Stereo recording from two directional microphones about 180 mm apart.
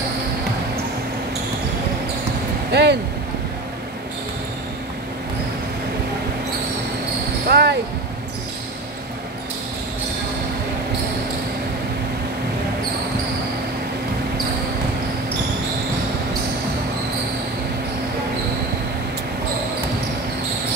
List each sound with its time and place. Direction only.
2.7 s speech: 65° right (ahead or behind)
7.4 s basketball bounce: 60° right (ahead or behind)